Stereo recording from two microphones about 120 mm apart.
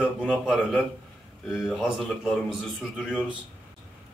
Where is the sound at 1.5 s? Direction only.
Centre (ahead or behind).